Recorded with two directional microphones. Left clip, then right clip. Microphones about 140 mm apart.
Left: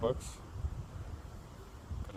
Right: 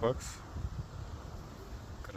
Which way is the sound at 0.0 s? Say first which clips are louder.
Right 1 dB; 20° left (ahead or behind).